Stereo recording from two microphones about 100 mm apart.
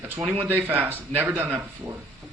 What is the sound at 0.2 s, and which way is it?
Speech, 25° right (ahead or behind).